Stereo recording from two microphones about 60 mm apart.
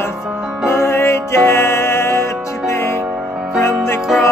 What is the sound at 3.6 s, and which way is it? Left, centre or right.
Music, left.